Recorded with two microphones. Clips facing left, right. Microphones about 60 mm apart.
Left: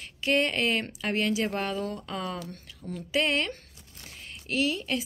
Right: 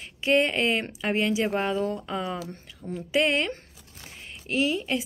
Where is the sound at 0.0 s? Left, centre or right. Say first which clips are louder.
Right 3 dB; right.